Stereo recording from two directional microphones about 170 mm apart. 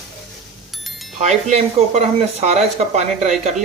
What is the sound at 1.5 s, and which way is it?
Speech, 40° right (ahead or behind).